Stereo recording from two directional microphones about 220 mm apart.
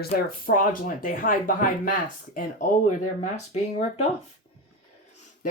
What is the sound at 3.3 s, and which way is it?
Speech, 25° left (ahead or behind).